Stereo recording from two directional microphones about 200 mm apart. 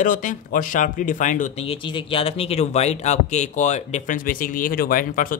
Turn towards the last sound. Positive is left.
turn(degrees=45)  # may be behind; listen again after turning